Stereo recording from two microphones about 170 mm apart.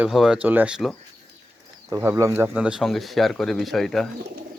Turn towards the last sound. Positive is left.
turn(degrees=0)  # may be behind; listen again after turning